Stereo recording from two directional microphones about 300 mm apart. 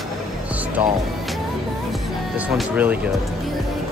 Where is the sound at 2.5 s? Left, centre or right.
Centre.